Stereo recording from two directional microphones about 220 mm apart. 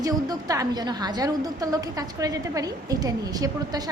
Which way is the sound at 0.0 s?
15° right (ahead or behind).